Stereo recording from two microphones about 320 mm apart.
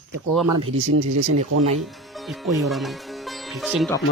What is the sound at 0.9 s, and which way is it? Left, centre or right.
Speech, right.